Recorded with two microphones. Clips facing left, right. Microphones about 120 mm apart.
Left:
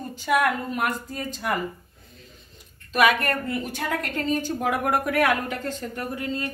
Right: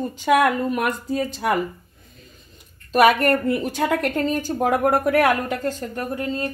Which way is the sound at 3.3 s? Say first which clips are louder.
Right 7 dB; 75° right (ahead or behind).